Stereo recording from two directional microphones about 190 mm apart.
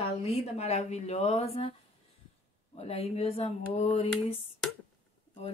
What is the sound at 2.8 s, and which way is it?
Speech, 35° left (ahead or behind).